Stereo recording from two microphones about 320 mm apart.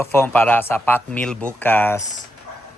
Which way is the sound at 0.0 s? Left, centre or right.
Centre.